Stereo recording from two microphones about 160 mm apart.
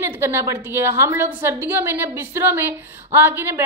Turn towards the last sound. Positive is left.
turn(degrees=-15)  # may be behind; listen again after turning